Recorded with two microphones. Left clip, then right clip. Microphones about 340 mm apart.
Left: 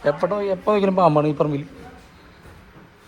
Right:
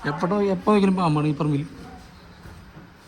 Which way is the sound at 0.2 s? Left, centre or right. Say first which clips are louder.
Left 2 dB; centre.